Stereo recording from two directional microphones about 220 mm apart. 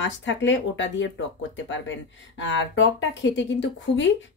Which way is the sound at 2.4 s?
60° left (ahead or behind).